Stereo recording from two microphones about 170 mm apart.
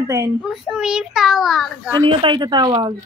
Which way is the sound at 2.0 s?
30° right (ahead or behind).